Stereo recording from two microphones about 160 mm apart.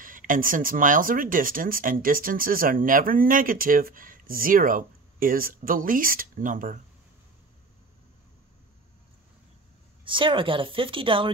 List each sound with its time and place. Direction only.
0.0 s speech: 55° right (ahead or behind)
10.0 s speech: 30° right (ahead or behind)